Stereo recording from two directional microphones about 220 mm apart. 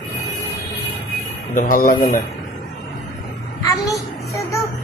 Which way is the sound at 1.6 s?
35° left (ahead or behind).